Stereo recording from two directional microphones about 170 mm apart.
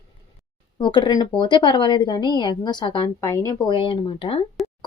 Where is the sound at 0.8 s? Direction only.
25° left (ahead or behind).